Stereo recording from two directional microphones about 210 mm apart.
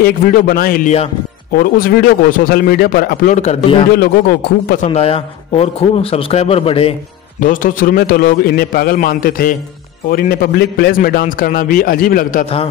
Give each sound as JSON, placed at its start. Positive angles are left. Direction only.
{"t": 0.0, "sound": "a man's voice", "side_deg": 45}
{"t": 3.3, "sound": "a man's voice", "side_deg": 30}
{"t": 4.0, "sound": "a man's voice", "side_deg": 45}
{"t": 4.8, "sound": "a man's voice", "side_deg": 30}
{"t": 7.3, "sound": "a man's voice", "side_deg": 40}